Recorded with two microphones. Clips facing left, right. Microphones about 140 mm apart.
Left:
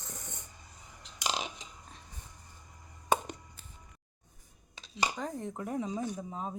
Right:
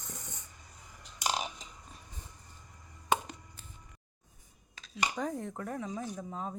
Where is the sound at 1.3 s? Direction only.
90° left.